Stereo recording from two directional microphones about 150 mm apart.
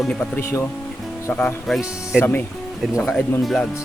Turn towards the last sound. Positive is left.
turn(degrees=0)  # may be behind; listen again after turning